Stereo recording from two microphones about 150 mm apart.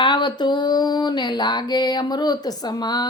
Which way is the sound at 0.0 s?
30° left (ahead or behind).